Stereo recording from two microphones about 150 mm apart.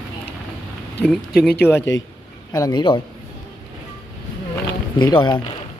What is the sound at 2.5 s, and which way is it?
Speech, 25° left (ahead or behind).